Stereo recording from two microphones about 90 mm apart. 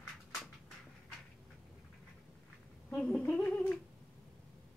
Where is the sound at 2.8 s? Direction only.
10° left (ahead or behind).